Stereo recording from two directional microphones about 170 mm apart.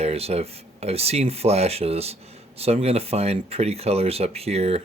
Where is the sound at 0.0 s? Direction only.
35° right (ahead or behind).